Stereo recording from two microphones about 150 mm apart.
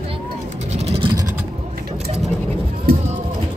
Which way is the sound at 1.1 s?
20° right (ahead or behind).